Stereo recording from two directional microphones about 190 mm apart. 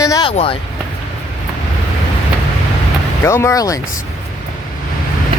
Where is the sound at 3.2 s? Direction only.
15° left (ahead or behind).